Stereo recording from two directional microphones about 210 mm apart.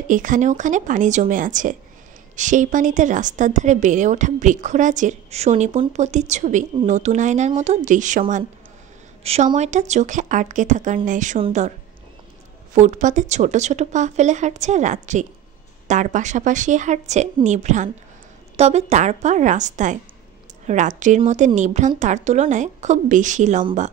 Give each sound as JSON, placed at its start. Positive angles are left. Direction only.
{"t": 0.1, "sound": "a woman's voice", "side_deg": -40}
{"t": 12.7, "sound": "a woman's voice", "side_deg": -35}